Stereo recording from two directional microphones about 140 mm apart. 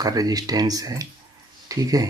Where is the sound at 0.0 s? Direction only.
25° right (ahead or behind).